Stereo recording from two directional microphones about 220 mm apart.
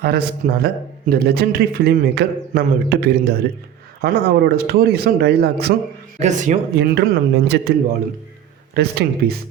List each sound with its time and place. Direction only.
0.0 s a man's voice: 45° right (ahead or behind)
6.1 s speech: 35° right (ahead or behind)
6.7 s a man's voice: 50° right (ahead or behind)
8.7 s a man's voice: 45° right (ahead or behind)